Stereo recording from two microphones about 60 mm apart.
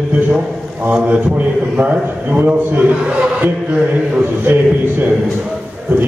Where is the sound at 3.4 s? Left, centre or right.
Right.